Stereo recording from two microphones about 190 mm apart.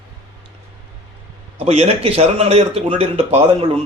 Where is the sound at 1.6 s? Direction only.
35° right (ahead or behind).